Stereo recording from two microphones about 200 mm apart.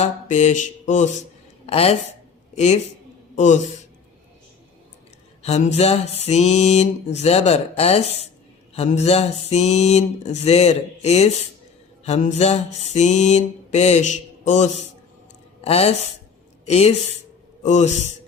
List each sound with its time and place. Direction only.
0.0 s mantra: 35° left (ahead or behind)
1.6 s speech: 30° left (ahead or behind)
3.3 s a man's voice: 35° left (ahead or behind)
5.4 s speech: 35° left (ahead or behind)
6.2 s mantra: 35° left (ahead or behind)